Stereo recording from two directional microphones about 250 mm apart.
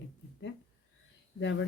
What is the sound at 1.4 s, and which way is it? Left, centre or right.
Speech, left.